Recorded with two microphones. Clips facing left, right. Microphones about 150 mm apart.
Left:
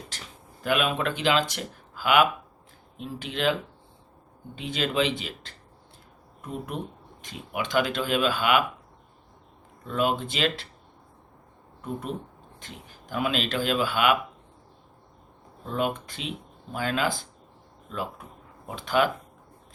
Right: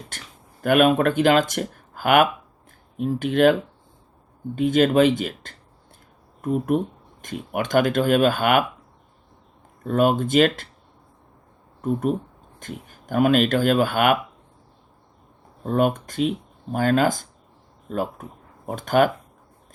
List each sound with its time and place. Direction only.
0.1 s speech: 55° right (ahead or behind)
9.8 s speech: 50° right (ahead or behind)
11.8 s speech: 45° right (ahead or behind)
15.6 s speech: 50° right (ahead or behind)